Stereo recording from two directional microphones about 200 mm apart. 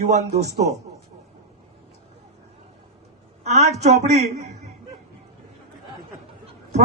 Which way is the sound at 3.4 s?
35° right (ahead or behind).